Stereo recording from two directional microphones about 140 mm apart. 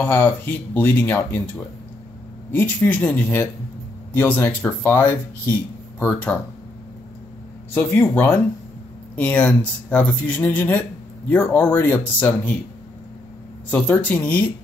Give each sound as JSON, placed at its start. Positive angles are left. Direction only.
{"t": 0.0, "sound": "speech", "side_deg": 15}
{"t": 2.5, "sound": "speech", "side_deg": 10}
{"t": 7.7, "sound": "speech", "side_deg": 15}
{"t": 13.7, "sound": "speech", "side_deg": 10}